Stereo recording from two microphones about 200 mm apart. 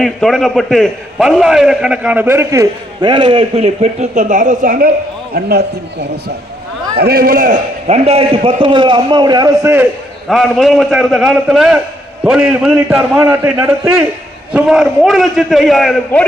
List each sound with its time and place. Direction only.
0.0 s a man's voice: centre (ahead or behind); by 9.8 s 15° right (ahead or behind)
10.2 s a man's voice: centre (ahead or behind)